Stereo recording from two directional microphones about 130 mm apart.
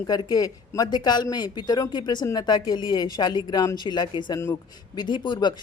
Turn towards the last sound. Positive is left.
turn(degrees=35)  # may be behind; listen again after turning